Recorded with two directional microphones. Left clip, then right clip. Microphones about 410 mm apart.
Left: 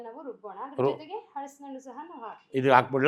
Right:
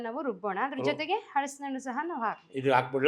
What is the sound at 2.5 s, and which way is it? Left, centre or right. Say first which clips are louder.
Speech: left 6 dB; left.